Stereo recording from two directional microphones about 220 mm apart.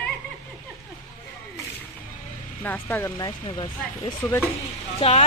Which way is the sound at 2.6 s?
10° left (ahead or behind).